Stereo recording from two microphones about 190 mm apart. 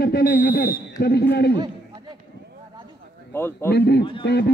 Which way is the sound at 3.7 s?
60° left (ahead or behind).